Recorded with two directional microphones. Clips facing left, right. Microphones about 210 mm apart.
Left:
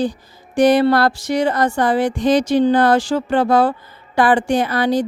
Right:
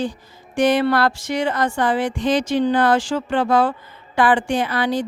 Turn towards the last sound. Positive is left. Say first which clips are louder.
# left 4 dB
turn(degrees=40)  # may be behind; listen again after turning